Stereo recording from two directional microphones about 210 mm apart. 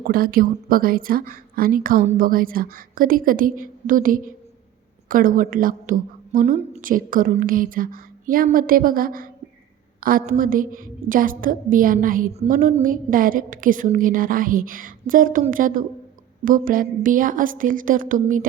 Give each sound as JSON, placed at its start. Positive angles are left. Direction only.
{"t": 0.0, "sound": "a woman's voice", "side_deg": -45}